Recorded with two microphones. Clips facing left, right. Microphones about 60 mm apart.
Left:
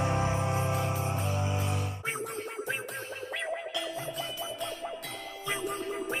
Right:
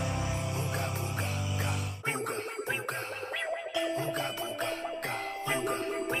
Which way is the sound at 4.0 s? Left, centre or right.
Right.